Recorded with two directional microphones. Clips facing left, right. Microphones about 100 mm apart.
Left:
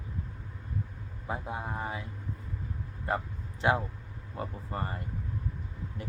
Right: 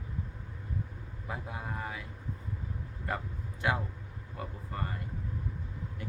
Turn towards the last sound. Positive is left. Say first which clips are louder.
# left 1 dB
turn(degrees=30)  # may be behind; listen again after turning